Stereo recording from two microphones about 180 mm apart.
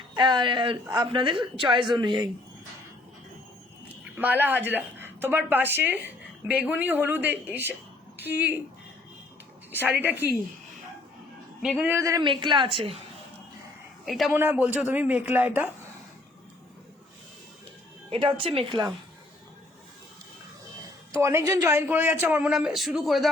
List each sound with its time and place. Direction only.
0.1 s a woman's voice: 25° right (ahead or behind)
4.2 s a woman's voice: 10° right (ahead or behind)
9.8 s a woman's voice: 10° right (ahead or behind)
11.6 s a woman's voice: 5° right (ahead or behind); by 13.0 s 30° right (ahead or behind)
14.0 s a woman's voice: centre (ahead or behind)
18.1 s a woman's voice: 30° right (ahead or behind)
21.1 s a woman's voice: 15° right (ahead or behind); by 23.3 s centre (ahead or behind)